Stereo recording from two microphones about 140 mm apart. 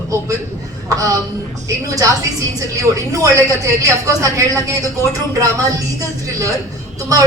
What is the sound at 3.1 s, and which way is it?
A woman's voice, 25° right (ahead or behind).